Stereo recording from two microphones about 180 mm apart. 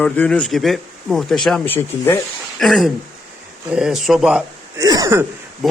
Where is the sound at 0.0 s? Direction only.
5° left (ahead or behind).